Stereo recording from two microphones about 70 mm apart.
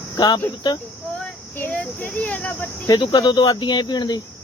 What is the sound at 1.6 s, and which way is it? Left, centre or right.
Speech, left.